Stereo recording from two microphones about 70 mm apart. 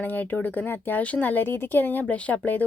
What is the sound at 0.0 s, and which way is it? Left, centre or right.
A woman's voice, left.